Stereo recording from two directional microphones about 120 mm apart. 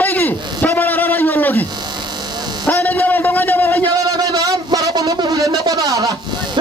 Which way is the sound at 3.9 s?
30° right (ahead or behind).